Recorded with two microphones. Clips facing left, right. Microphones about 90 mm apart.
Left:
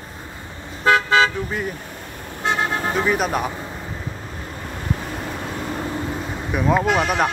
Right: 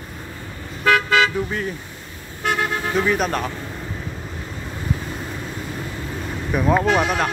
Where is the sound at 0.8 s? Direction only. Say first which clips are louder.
Left 1 dB; 30° left (ahead or behind).